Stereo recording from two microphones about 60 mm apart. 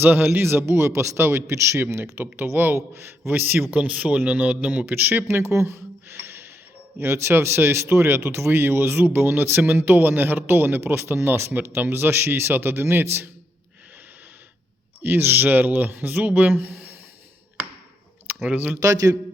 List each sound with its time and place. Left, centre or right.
0.0 s speech: right
0.4 s a man's voice: right
4.9 s speech: right
15.0 s speech: right
18.4 s a man's voice: right
18.8 s a man's voice: right